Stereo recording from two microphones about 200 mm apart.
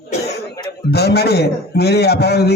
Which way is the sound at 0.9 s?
55° left (ahead or behind).